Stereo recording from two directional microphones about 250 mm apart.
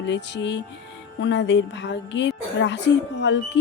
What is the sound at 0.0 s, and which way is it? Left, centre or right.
A woman's voice, left.